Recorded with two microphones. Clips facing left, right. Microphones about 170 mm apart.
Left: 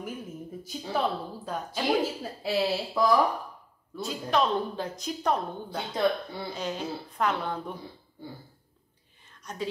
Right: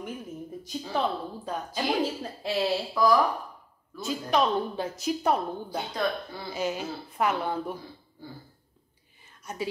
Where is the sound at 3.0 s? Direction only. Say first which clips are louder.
Right 1 dB; 25° left (ahead or behind).